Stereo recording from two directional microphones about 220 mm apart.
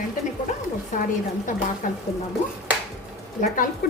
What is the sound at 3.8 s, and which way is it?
Speech, 40° left (ahead or behind).